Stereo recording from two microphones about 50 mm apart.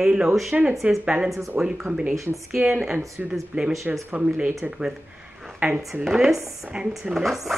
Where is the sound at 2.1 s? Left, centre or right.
Right.